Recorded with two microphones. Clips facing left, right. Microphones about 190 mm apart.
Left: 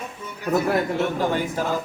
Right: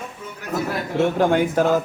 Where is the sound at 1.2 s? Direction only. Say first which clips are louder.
Right 6 dB; 60° right (ahead or behind).